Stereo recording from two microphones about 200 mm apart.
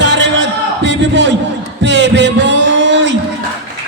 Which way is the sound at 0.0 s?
60° right (ahead or behind).